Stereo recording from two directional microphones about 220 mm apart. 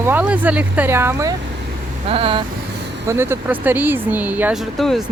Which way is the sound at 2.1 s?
25° right (ahead or behind).